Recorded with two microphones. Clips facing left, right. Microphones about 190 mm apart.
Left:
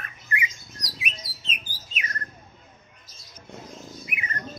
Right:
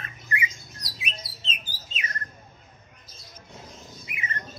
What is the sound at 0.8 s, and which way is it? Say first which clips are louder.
Bird: left 1 dB; 25° right (ahead or behind).